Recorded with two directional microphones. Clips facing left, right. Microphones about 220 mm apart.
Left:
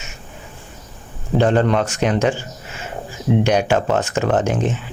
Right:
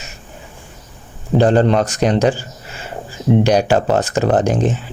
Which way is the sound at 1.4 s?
35° right (ahead or behind).